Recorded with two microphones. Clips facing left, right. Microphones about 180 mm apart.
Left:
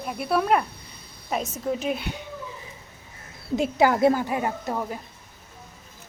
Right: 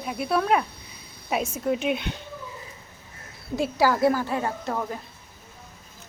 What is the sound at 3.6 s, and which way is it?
Speech, 20° left (ahead or behind).